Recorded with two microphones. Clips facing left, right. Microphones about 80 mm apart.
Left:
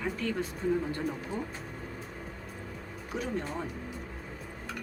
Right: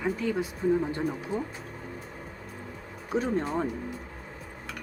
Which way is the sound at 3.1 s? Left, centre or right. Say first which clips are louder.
Right 7 dB; right.